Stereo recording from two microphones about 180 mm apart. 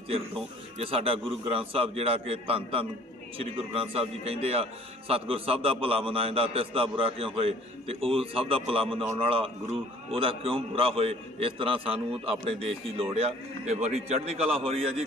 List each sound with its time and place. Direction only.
0.1 s a man's voice: 30° right (ahead or behind)